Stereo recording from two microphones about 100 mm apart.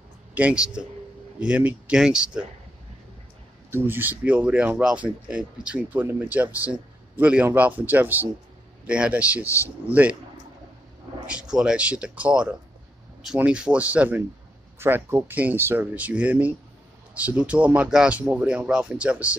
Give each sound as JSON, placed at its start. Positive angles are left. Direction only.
{"t": 0.3, "sound": "a man's voice", "side_deg": -15}
{"t": 3.7, "sound": "speech", "side_deg": -20}
{"t": 11.5, "sound": "speech", "side_deg": -10}